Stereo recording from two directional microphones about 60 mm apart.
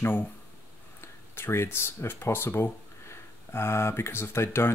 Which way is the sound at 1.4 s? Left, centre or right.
Left.